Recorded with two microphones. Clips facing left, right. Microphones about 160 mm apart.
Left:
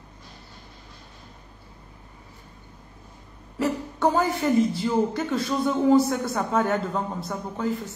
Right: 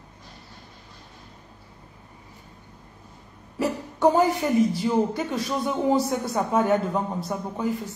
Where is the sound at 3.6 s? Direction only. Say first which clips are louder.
Right 1 dB; 15° right (ahead or behind).